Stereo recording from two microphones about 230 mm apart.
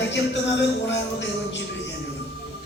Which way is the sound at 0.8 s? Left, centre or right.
Left.